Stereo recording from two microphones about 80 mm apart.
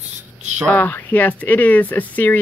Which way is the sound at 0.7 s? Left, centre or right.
Left.